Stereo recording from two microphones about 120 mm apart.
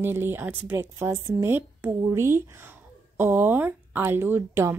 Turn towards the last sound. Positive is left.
turn(degrees=-20)  # may be behind; listen again after turning